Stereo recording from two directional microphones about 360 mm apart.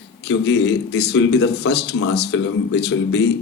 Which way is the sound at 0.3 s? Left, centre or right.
Left.